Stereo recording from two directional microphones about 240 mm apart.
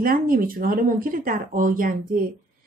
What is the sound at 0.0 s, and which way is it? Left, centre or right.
Speech, right.